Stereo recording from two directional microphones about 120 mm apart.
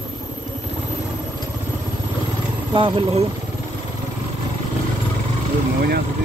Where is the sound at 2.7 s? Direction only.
55° right (ahead or behind).